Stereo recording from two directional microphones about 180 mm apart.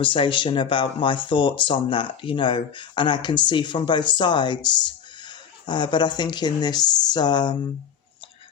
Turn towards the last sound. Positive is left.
turn(degrees=25)  # may be behind; listen again after turning